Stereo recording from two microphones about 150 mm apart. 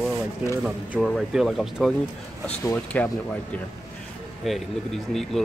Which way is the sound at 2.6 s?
10° left (ahead or behind).